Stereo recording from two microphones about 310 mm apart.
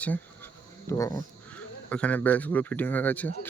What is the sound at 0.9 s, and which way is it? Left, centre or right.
Speech, centre.